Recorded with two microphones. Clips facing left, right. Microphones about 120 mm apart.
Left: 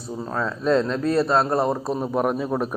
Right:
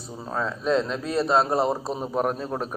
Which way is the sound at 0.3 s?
Centre (ahead or behind).